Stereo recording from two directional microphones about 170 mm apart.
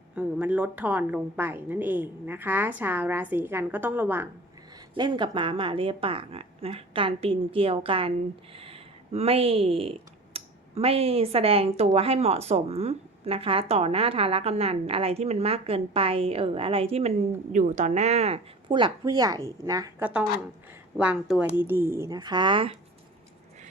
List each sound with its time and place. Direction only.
0.2 s a woman's voice: 10° right (ahead or behind)
4.9 s a woman's voice: 25° right (ahead or behind)
20.0 s a woman's voice: 10° right (ahead or behind); by 22.7 s 30° right (ahead or behind)